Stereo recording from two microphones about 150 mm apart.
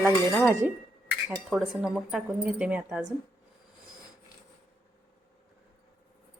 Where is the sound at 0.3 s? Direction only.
20° right (ahead or behind).